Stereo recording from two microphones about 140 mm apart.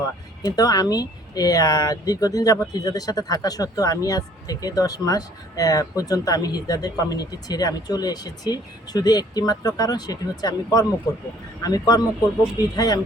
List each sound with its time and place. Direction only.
0.0 s speech: 25° left (ahead or behind)